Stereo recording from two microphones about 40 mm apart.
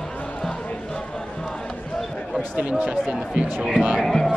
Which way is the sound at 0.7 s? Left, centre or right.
Left.